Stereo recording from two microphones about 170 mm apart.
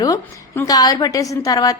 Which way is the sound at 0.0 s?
20° left (ahead or behind).